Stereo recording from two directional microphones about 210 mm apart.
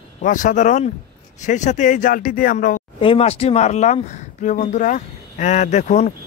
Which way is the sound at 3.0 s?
25° left (ahead or behind).